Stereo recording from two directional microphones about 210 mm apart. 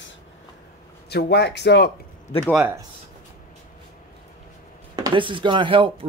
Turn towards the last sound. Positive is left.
turn(degrees=-25)  # may be behind; listen again after turning